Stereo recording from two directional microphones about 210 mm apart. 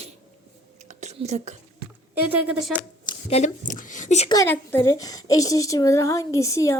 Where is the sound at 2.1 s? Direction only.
5° right (ahead or behind).